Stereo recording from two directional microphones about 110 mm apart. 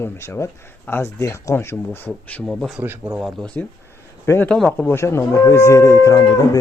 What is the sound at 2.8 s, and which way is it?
Speech, 15° right (ahead or behind).